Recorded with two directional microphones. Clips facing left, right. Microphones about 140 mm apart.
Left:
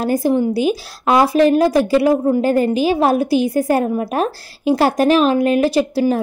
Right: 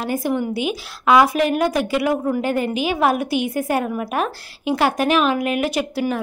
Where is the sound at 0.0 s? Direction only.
35° left (ahead or behind).